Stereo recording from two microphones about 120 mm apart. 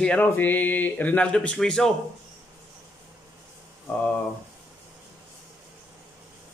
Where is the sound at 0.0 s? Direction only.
10° left (ahead or behind).